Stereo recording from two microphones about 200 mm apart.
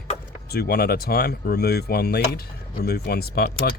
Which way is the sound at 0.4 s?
50° left (ahead or behind).